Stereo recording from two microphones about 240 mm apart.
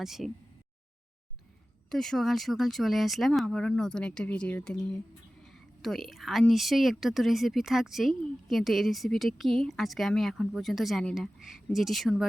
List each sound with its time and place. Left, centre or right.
0.0 s a woman's voice: centre
1.9 s a woman's voice: centre